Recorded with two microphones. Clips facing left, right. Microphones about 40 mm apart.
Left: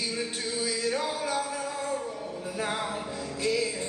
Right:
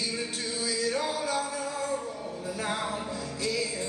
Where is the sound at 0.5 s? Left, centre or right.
Centre.